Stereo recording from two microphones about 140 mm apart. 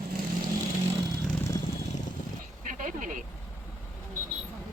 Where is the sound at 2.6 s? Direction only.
65° right (ahead or behind).